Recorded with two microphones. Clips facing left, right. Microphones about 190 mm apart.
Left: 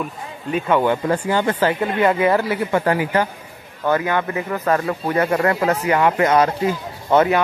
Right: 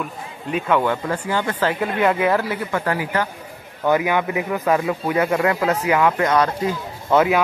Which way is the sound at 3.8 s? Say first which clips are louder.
Right 1 dB; 15° right (ahead or behind).